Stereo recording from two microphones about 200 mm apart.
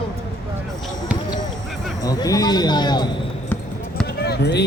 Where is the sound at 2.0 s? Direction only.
20° left (ahead or behind).